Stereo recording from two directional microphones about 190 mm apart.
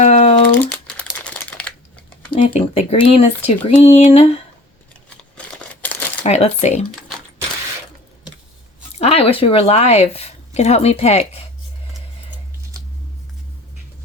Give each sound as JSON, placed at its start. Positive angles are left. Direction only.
{"t": 0.0, "sound": "typing", "side_deg": 35}
{"t": 0.6, "sound": "crumpling", "side_deg": 5}
{"t": 2.3, "sound": "speech", "side_deg": 35}
{"t": 5.8, "sound": "a sound", "side_deg": 10}
{"t": 6.2, "sound": "speech", "side_deg": 35}
{"t": 9.0, "sound": "speech", "side_deg": 35}